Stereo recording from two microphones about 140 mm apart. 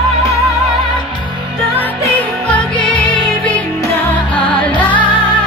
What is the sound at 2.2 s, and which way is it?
Music, 10° left (ahead or behind).